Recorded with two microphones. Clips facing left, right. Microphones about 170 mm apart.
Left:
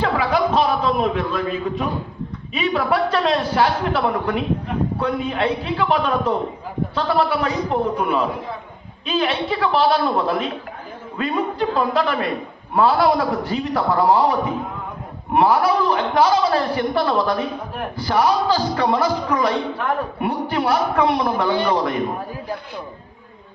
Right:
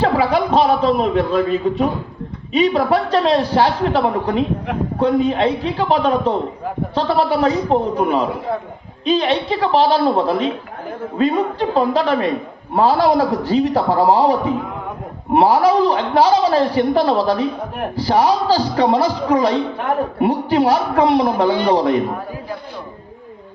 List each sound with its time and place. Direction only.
0.0 s chuckle: 30° right (ahead or behind)
2.6 s a man's voice: 35° right (ahead or behind)
11.7 s a man's voice: 30° right (ahead or behind)